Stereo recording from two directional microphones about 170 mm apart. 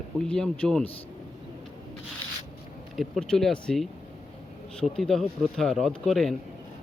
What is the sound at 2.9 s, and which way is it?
Speech, centre (ahead or behind).